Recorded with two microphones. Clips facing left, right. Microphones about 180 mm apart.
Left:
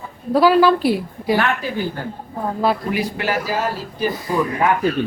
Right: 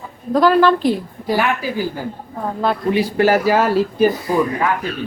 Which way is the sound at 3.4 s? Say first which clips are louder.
Right 8 dB; 70° right (ahead or behind).